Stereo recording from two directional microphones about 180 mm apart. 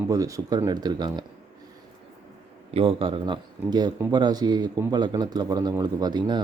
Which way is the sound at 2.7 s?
30° right (ahead or behind).